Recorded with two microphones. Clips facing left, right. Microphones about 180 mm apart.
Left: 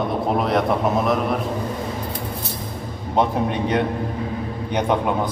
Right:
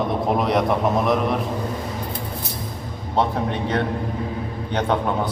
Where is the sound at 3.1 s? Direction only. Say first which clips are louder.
Left 2 dB; 15° left (ahead or behind).